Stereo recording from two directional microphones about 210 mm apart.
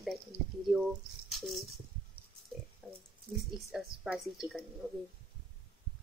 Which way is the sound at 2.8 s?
Centre (ahead or behind).